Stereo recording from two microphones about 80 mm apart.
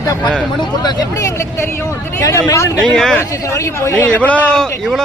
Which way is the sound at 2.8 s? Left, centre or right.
Centre.